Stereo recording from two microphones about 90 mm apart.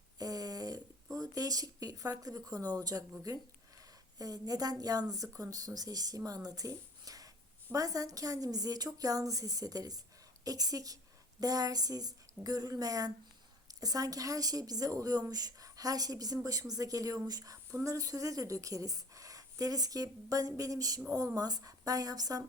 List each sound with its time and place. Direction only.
0.2 s a woman's voice: 45° right (ahead or behind)